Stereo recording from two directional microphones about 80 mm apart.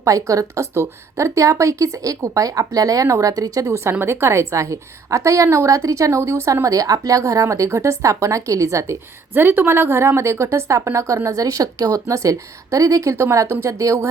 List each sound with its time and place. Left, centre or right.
0.0 s a woman's voice: right
9.3 s a woman's voice: right